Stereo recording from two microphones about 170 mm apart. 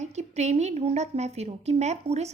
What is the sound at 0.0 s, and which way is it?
A woman's voice, 40° right (ahead or behind).